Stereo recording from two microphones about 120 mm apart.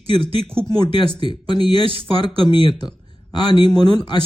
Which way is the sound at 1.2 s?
40° left (ahead or behind).